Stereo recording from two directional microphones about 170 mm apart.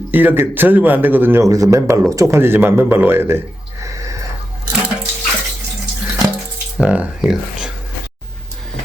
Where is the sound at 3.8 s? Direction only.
20° right (ahead or behind).